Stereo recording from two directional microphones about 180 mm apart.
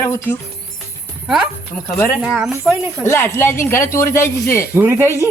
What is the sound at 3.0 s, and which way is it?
Speech, 15° left (ahead or behind).